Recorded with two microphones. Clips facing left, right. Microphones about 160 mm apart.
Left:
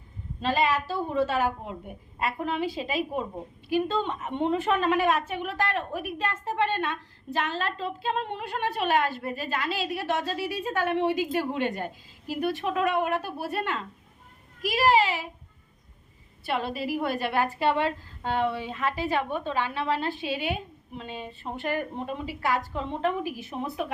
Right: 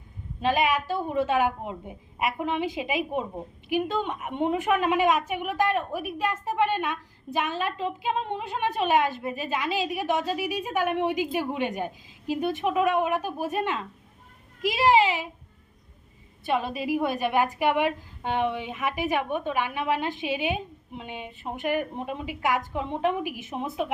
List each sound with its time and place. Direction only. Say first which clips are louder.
0.4 s a woman's voice: right 1 dB; 15° right (ahead or behind)
16.5 s a woman's voice: right 3 dB; 15° right (ahead or behind)